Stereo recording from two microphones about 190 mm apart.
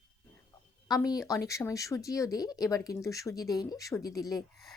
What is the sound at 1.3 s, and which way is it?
Speech, 15° left (ahead or behind).